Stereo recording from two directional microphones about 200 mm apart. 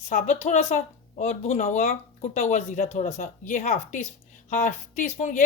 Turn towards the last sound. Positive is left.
turn(degrees=40)  # may be behind; listen again after turning